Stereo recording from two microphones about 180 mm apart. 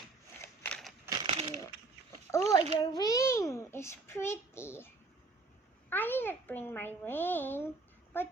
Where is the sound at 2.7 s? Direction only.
20° left (ahead or behind).